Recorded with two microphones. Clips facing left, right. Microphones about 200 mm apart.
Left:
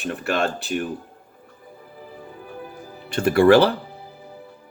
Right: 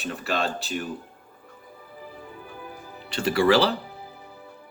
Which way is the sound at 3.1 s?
50° left (ahead or behind).